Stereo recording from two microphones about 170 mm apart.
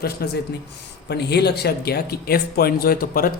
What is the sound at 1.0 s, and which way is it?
Speech, 75° left (ahead or behind).